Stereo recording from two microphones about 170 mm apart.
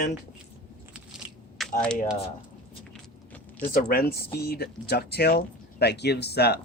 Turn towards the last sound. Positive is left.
turn(degrees=70)  # may be behind; listen again after turning